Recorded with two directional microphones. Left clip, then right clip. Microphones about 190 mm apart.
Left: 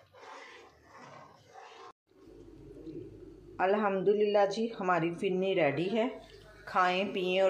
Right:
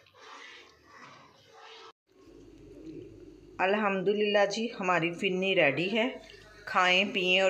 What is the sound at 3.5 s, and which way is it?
A woman's voice, centre (ahead or behind).